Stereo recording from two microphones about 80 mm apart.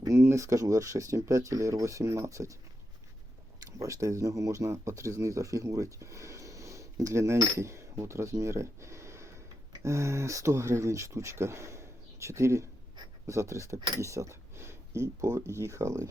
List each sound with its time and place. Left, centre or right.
0.0 s speech: right
3.6 s speech: right
13.7 s speech: right
14.0 s speech: right